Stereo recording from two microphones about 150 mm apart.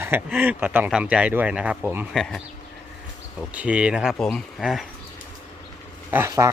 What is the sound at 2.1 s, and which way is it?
Speech, centre (ahead or behind).